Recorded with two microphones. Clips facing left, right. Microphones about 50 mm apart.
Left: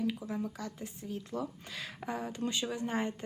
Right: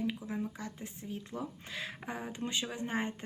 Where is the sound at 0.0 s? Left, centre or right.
Right.